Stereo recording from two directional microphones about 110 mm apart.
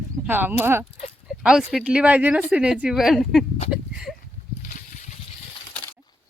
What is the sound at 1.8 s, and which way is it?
Speech, 10° right (ahead or behind).